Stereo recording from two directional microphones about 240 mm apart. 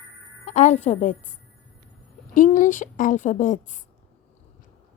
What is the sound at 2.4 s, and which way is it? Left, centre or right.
A woman's voice, left.